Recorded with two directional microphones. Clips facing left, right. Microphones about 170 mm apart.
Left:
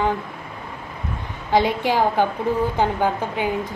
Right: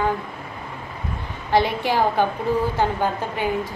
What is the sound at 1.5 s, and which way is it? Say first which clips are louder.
A woman's voice: left 1 dB; 15° left (ahead or behind).